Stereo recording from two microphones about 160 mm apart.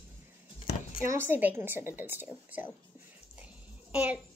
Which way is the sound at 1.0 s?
15° right (ahead or behind).